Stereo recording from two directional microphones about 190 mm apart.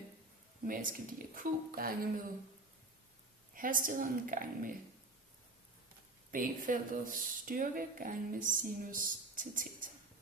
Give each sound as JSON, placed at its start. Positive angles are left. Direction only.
{"t": 0.7, "sound": "speech", "side_deg": -45}
{"t": 3.5, "sound": "speech", "side_deg": -45}
{"t": 6.3, "sound": "speech", "side_deg": -45}